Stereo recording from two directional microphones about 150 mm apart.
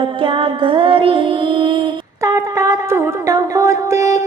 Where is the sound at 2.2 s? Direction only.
20° right (ahead or behind).